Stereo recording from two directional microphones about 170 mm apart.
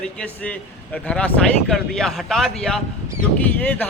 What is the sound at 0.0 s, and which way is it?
A man's voice, 5° left (ahead or behind).